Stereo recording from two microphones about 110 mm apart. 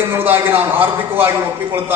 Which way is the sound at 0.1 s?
20° right (ahead or behind).